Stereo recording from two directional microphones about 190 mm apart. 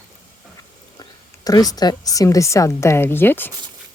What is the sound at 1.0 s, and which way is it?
A woman's voice, 20° left (ahead or behind).